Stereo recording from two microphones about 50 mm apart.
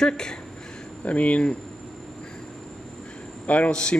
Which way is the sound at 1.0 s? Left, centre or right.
Left.